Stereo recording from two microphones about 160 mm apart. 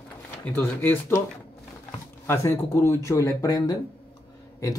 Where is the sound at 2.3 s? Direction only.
15° left (ahead or behind).